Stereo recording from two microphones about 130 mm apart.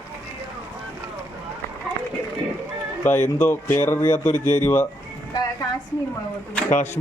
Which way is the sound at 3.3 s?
15° left (ahead or behind).